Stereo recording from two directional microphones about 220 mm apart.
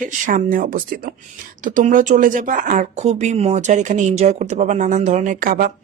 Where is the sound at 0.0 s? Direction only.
35° right (ahead or behind).